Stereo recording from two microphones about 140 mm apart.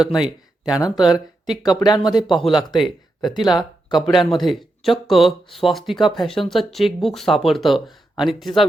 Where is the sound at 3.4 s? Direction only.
30° left (ahead or behind).